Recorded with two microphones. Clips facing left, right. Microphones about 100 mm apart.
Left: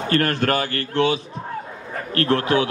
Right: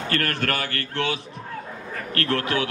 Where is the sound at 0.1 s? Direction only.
25° left (ahead or behind).